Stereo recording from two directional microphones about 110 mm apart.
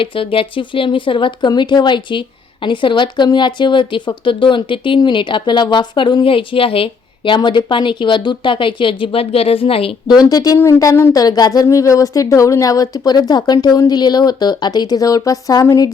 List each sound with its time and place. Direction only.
0.0 s speech: 55° left (ahead or behind)
10.1 s speech: 35° left (ahead or behind)